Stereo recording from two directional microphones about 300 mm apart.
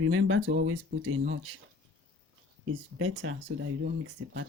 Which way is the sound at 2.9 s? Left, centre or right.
Right.